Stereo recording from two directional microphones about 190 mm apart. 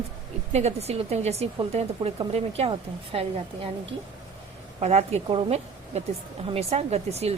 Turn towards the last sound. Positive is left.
turn(degrees=-35)  # may be behind; listen again after turning